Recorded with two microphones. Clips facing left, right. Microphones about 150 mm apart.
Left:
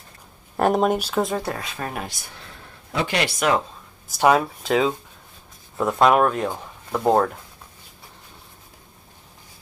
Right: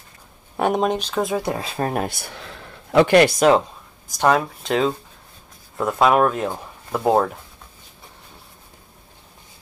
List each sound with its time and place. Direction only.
0.6 s speech: centre (ahead or behind)
1.3 s speech: 15° right (ahead or behind)
1.6 s speech: 35° right (ahead or behind)
2.0 s speech: 60° right (ahead or behind)
3.3 s speech: 30° right (ahead or behind)
4.1 s speech: 10° left (ahead or behind)